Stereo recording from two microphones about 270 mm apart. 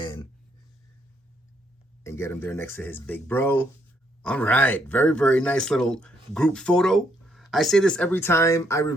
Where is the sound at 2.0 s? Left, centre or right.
Centre.